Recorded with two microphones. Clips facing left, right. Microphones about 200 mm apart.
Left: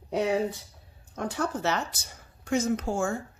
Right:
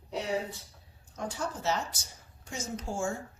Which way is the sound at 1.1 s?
60° left (ahead or behind).